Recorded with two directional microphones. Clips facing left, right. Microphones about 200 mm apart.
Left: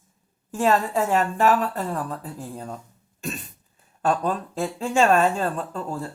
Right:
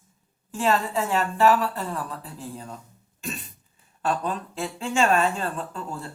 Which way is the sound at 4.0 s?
40° left (ahead or behind).